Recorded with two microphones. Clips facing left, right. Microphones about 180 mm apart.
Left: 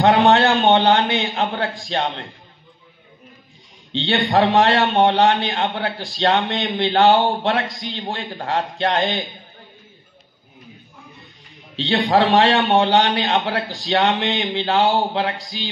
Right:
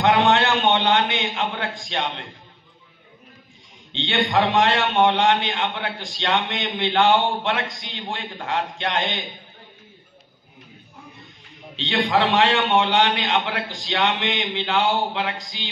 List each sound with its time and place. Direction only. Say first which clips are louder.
0.0 s a man's voice: left 4 dB; 35° left (ahead or behind)
3.9 s a man's voice: left 3 dB; 35° left (ahead or behind)
11.7 s a man's voice: left 4 dB; 35° left (ahead or behind)